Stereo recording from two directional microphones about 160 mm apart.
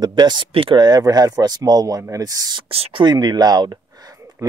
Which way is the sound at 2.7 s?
35° right (ahead or behind).